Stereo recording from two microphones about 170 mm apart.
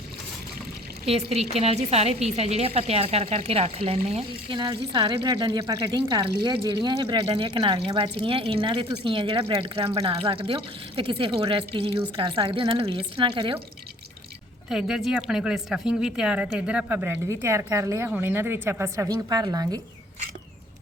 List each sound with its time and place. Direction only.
1.0 s speech: 35° right (ahead or behind)
14.7 s speech: 5° right (ahead or behind); by 19.8 s 20° right (ahead or behind)